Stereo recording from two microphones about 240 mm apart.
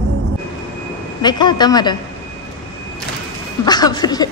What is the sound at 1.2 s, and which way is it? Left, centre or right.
Speech, centre.